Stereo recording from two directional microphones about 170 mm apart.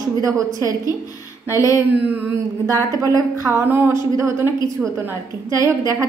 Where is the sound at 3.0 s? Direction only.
20° right (ahead or behind).